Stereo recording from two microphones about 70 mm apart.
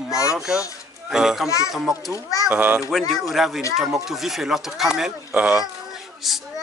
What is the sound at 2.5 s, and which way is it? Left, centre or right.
Speech, centre.